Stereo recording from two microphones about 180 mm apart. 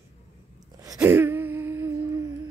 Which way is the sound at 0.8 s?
15° right (ahead or behind).